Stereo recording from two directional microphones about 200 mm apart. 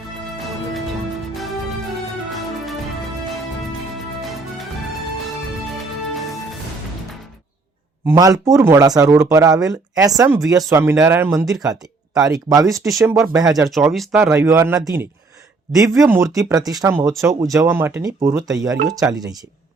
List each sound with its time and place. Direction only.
0.3 s music: centre (ahead or behind)
4.2 s music: centre (ahead or behind)
5.7 s music: centre (ahead or behind)
8.0 s speech: 15° right (ahead or behind)
13.7 s speech: centre (ahead or behind)
14.2 s speech: 15° right (ahead or behind)